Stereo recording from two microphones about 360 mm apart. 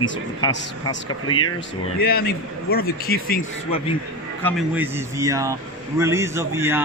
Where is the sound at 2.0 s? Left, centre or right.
Left.